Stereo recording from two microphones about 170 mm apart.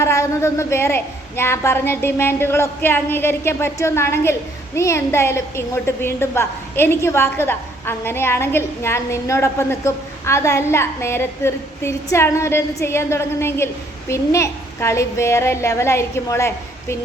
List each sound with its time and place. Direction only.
0.0 s a woman's voice: 15° left (ahead or behind)